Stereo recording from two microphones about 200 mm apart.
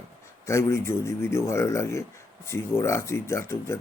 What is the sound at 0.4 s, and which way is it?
Speech, 15° left (ahead or behind).